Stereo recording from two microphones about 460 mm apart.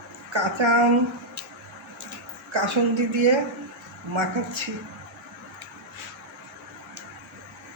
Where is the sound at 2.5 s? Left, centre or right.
Right.